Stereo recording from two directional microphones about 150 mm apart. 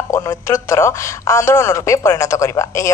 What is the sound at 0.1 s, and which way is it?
Speech, 20° left (ahead or behind).